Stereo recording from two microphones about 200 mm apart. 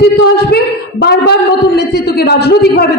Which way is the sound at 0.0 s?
50° left (ahead or behind).